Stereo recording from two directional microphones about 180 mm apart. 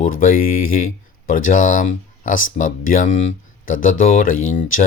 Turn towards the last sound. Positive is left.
turn(degrees=50)  # may be behind; listen again after turning